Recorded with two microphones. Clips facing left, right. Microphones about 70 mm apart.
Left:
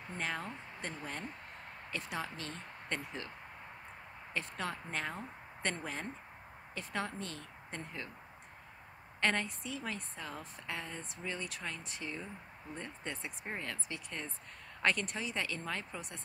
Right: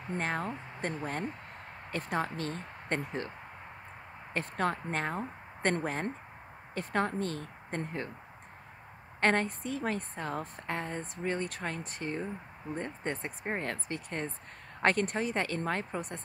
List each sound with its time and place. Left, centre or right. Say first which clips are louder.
0.2 s a woman's voice: right 4 dB; right
4.3 s a woman's voice: right 8 dB; right
9.2 s a woman's voice: right 6 dB; right